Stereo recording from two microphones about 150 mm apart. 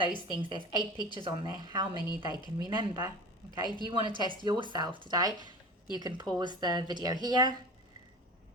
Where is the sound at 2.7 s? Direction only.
30° right (ahead or behind).